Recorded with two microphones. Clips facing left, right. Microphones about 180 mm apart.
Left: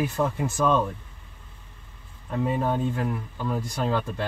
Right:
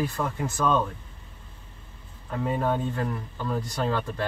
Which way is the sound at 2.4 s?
10° left (ahead or behind).